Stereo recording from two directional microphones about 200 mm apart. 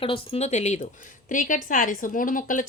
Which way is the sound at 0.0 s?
25° left (ahead or behind).